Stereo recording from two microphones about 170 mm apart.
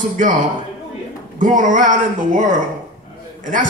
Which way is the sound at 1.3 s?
50° right (ahead or behind).